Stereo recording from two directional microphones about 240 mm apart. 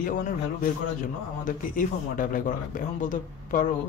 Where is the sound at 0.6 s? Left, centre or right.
Left.